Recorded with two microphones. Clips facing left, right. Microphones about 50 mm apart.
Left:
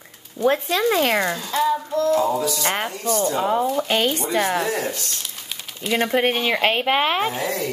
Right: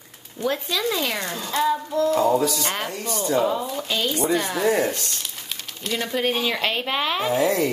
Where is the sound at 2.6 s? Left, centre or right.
Left.